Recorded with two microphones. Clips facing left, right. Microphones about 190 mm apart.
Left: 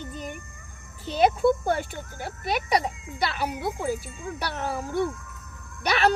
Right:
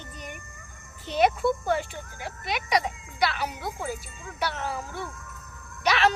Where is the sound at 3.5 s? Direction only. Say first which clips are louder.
Left 5 dB; 60° left (ahead or behind).